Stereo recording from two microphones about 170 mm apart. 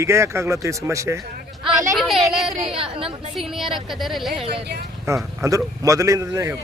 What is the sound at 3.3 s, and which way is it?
Speech, centre (ahead or behind).